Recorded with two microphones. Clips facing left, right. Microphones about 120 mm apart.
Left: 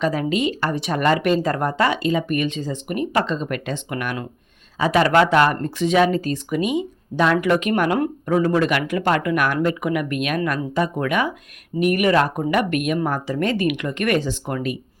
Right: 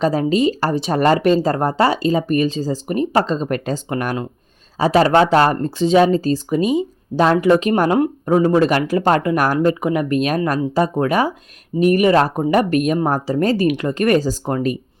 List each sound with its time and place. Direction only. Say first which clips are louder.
0.0 s speech: right 5 dB; 35° right (ahead or behind)